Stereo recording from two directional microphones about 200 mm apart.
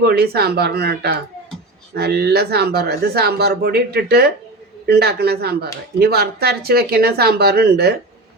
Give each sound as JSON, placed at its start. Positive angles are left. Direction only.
{"t": 0.0, "sound": "speech", "side_deg": -50}